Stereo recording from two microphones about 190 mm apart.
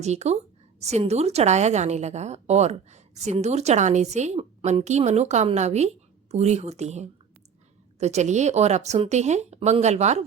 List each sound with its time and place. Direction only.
0.0 s a woman's voice: 35° right (ahead or behind)